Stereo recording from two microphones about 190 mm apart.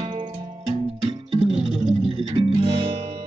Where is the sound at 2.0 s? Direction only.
30° right (ahead or behind).